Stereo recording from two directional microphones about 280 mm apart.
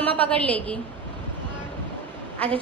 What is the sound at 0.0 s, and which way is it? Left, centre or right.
Speech, centre.